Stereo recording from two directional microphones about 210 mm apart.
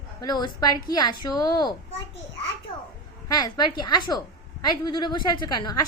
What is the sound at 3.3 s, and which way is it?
A woman's voice, 20° left (ahead or behind).